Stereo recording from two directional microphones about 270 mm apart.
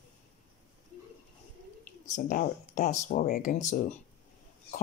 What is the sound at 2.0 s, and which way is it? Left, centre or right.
Speech, left.